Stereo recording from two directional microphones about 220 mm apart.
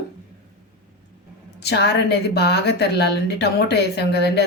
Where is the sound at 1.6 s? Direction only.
50° left (ahead or behind).